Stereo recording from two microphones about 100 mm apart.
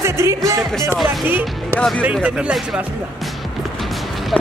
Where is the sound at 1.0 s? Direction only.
20° right (ahead or behind).